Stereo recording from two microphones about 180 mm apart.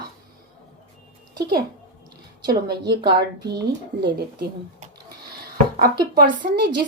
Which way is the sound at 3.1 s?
65° right (ahead or behind).